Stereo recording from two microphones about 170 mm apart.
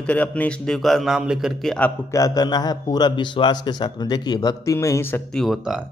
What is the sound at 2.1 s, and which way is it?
A man's voice, 20° left (ahead or behind).